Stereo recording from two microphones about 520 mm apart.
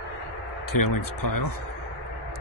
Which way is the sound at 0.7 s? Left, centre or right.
Left.